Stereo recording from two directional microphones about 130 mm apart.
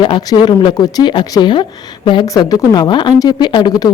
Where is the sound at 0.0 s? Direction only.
35° left (ahead or behind).